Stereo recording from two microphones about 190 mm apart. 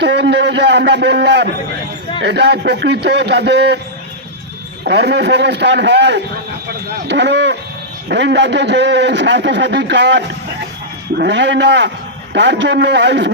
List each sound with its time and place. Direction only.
0.0 s a man's voice: 65° right (ahead or behind)
4.9 s a man's voice: 60° right (ahead or behind)